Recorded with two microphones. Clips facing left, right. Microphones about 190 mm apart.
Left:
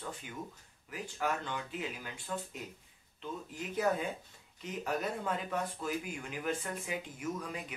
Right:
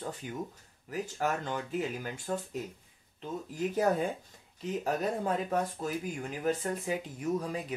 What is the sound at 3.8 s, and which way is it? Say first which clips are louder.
Speech: right 3 dB; 40° right (ahead or behind).